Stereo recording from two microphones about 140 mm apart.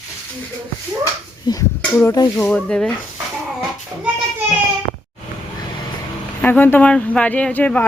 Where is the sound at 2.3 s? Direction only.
10° left (ahead or behind).